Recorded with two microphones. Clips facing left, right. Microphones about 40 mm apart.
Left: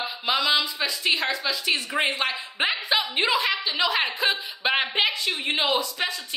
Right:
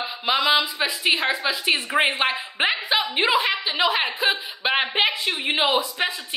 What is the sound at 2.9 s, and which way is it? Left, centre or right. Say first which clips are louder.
A woman's voice: right 2 dB; centre.